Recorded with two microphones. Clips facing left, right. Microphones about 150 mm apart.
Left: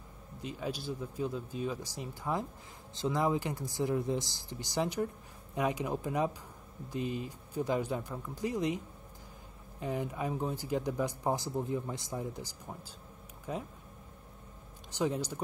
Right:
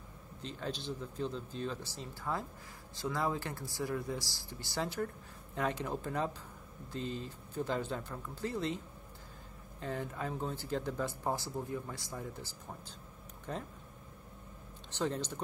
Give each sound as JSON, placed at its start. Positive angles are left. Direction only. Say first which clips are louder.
{"t": 0.4, "sound": "speech", "louder": "left 3 dB", "side_deg": 10}
{"t": 14.9, "sound": "speech", "louder": "left 3 dB", "side_deg": 10}